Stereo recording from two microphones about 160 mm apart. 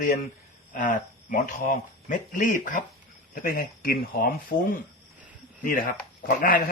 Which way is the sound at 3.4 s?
70° left (ahead or behind).